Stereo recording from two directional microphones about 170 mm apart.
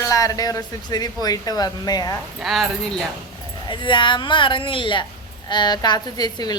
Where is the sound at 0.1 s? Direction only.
20° left (ahead or behind).